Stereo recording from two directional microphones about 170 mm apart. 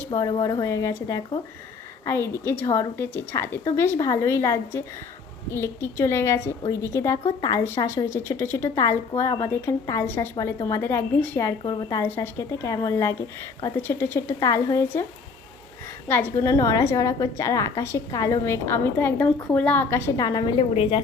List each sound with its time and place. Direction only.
0.1 s a woman's voice: 25° left (ahead or behind)
16.0 s a woman's voice: 15° left (ahead or behind); by 21.0 s 30° left (ahead or behind)